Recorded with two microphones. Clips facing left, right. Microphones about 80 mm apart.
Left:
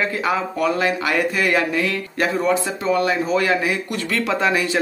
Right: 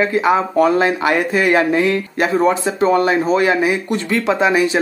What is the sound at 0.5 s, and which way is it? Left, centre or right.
Speech, right.